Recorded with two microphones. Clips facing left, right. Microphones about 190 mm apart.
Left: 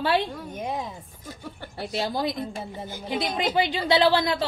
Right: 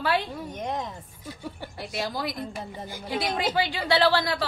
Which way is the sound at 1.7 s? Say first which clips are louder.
Left 5 dB; 25° left (ahead or behind).